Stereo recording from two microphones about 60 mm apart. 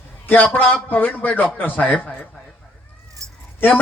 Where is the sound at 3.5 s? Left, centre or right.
Left.